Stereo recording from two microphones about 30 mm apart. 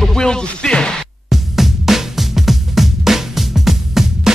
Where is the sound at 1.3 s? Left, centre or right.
Centre.